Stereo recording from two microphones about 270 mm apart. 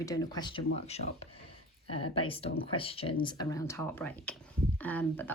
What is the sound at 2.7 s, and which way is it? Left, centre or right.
A woman's voice, left.